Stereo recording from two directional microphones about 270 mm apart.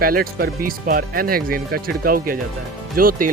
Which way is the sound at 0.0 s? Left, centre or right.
Right.